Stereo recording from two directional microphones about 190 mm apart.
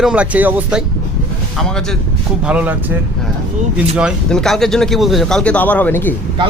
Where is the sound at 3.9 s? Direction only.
Centre (ahead or behind).